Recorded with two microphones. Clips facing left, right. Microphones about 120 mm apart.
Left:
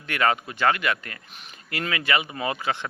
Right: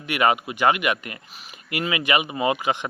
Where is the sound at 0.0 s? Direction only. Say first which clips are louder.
Right 3 dB; 15° right (ahead or behind).